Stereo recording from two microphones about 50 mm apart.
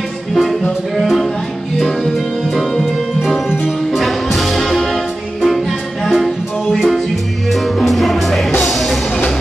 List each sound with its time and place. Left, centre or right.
0.3 s music: centre
2.8 s music: centre